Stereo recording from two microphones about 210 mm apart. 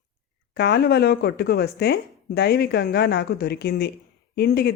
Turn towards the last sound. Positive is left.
turn(degrees=50)  # may be behind; listen again after turning